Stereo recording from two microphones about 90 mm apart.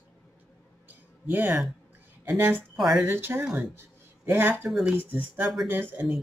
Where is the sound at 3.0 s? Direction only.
25° right (ahead or behind).